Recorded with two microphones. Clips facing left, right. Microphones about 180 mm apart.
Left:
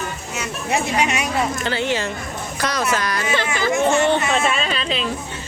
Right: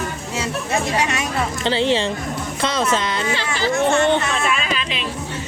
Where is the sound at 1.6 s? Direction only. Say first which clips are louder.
Right 4 dB; 30° right (ahead or behind).